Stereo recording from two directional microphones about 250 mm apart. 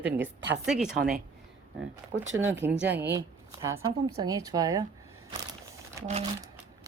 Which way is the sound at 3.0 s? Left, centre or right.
Centre.